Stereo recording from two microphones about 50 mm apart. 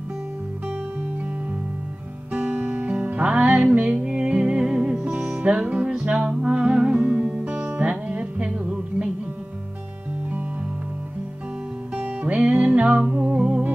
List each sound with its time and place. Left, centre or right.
2.3 s music: right
7.0 s music: right
11.9 s music: right